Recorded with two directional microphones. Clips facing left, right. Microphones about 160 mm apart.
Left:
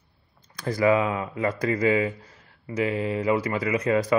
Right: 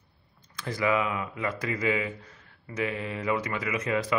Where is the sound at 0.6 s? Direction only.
40° left (ahead or behind).